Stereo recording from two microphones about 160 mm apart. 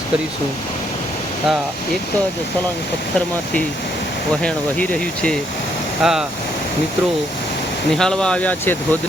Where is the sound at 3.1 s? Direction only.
5° left (ahead or behind).